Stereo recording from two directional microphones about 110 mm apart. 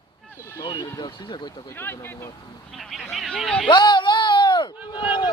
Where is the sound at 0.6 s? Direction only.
45° left (ahead or behind).